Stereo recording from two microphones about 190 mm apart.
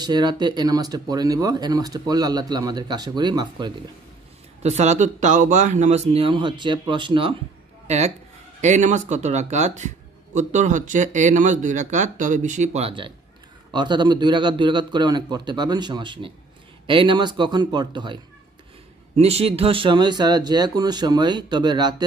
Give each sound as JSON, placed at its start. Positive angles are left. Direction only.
{"t": 0.0, "sound": "speech", "side_deg": -20}
{"t": 4.6, "sound": "speech", "side_deg": -35}
{"t": 7.8, "sound": "a sound", "side_deg": -35}
{"t": 8.5, "sound": "speech", "side_deg": -40}